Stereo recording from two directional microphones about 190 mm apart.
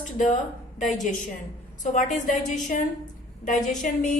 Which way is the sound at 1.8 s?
45° left (ahead or behind).